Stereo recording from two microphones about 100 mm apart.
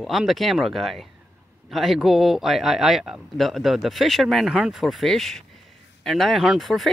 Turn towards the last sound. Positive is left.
turn(degrees=0)  # may be behind; listen again after turning